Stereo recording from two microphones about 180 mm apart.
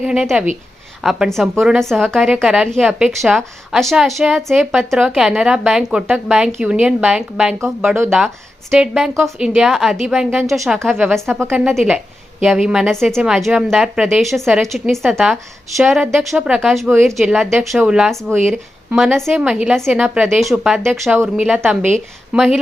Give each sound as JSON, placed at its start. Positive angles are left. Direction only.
{"t": 0.0, "sound": "a woman's voice", "side_deg": 0}
{"t": 8.7, "sound": "a woman's voice", "side_deg": 0}